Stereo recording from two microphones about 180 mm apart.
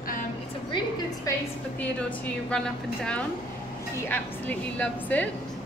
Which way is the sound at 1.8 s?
10° left (ahead or behind).